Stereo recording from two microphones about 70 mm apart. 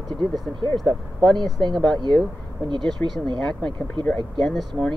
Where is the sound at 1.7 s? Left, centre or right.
Centre.